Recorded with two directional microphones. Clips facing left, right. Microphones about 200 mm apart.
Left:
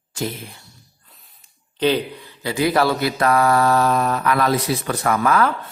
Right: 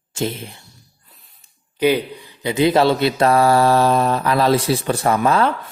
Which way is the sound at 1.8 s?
10° right (ahead or behind).